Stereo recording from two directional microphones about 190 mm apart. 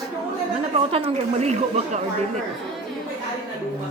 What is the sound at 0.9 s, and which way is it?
Speech, 30° right (ahead or behind).